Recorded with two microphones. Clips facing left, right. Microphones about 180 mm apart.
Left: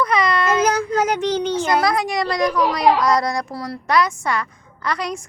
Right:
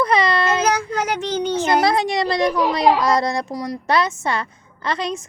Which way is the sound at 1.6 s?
25° right (ahead or behind).